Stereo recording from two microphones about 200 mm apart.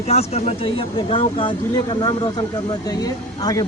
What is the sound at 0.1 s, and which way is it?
Speech, 30° left (ahead or behind).